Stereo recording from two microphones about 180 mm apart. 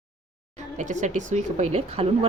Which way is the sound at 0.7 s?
45° right (ahead or behind).